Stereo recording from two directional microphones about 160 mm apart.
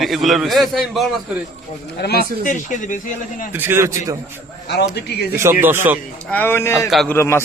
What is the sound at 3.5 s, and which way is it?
Speech, 15° right (ahead or behind).